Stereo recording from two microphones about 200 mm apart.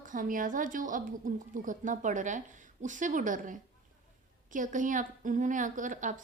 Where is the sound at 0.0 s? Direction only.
40° right (ahead or behind).